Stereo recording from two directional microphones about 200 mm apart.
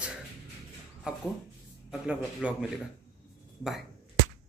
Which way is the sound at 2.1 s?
5° right (ahead or behind).